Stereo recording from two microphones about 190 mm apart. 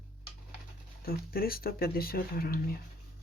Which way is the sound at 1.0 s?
50° left (ahead or behind).